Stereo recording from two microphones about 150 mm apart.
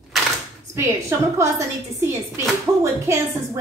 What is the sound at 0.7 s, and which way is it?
Speech, 20° right (ahead or behind).